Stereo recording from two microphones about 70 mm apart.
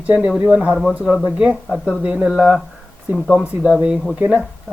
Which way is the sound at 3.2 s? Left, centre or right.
Centre.